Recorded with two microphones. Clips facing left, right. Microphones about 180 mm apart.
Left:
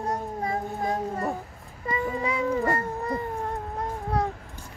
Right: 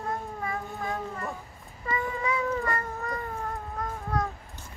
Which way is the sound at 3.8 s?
30° left (ahead or behind).